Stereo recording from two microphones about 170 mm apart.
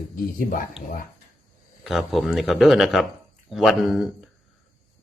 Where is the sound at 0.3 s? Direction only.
55° left (ahead or behind).